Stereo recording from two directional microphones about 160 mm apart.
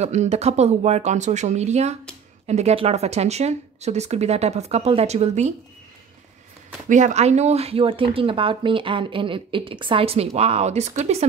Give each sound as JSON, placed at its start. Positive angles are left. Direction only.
{"t": 0.0, "sound": "speech", "side_deg": -45}
{"t": 6.9, "sound": "speech", "side_deg": -50}